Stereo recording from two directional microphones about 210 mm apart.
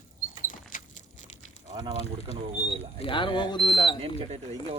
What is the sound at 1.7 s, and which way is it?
Speech, 20° right (ahead or behind).